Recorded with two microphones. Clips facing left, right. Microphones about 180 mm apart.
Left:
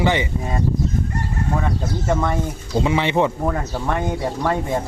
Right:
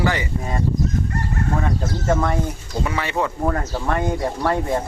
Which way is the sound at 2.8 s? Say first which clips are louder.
Left 5 dB; 20° left (ahead or behind).